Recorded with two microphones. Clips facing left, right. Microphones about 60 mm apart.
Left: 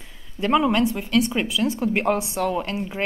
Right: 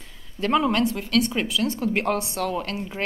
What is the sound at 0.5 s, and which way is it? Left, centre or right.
Speech, centre.